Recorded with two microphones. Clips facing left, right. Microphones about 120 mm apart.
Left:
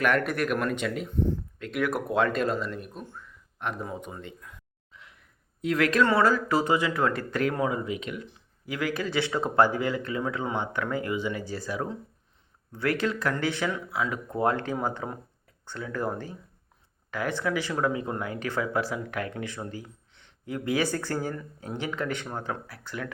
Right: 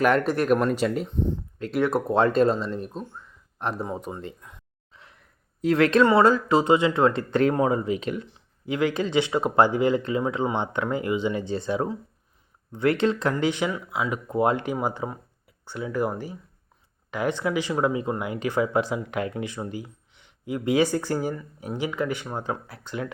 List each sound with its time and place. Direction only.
0.0 s speech: 30° right (ahead or behind)
1.0 s speech: 20° right (ahead or behind)
1.5 s speech: 35° right (ahead or behind)
4.4 s a sound: 30° right (ahead or behind)
5.6 s speech: 30° right (ahead or behind)